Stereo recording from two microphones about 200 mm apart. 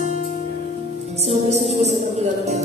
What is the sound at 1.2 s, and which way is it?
Speech, 30° right (ahead or behind).